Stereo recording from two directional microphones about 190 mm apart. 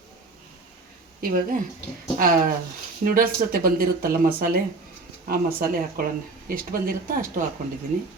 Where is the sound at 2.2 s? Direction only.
50° right (ahead or behind).